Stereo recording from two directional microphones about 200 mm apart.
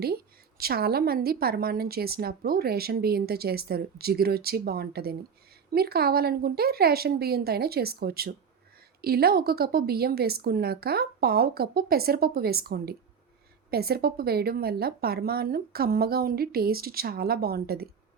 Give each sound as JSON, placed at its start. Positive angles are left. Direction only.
{"t": 0.6, "sound": "a woman's voice", "side_deg": -50}